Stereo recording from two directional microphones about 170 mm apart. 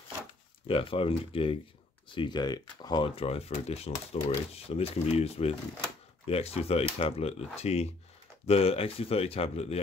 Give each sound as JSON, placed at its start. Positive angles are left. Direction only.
{"t": 0.7, "sound": "speech", "side_deg": 35}